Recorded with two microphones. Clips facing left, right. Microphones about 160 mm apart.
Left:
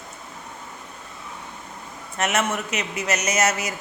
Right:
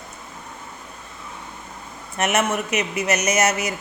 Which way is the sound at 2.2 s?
15° right (ahead or behind).